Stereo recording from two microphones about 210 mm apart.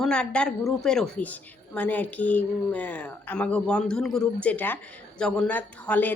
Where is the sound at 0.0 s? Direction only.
5° left (ahead or behind).